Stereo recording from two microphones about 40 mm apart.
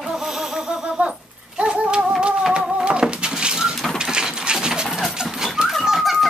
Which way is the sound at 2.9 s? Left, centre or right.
Right.